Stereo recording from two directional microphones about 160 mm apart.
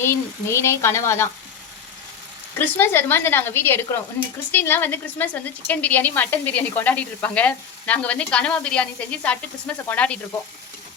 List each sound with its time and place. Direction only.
0.0 s speech: 15° left (ahead or behind)
2.6 s speech: 10° left (ahead or behind)